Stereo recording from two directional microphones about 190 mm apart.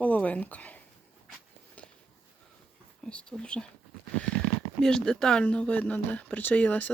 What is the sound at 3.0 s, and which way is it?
Speech, 5° left (ahead or behind).